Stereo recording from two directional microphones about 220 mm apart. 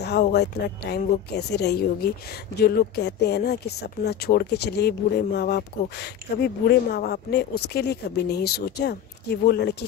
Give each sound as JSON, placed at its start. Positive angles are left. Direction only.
{"t": 0.0, "sound": "speech", "side_deg": 50}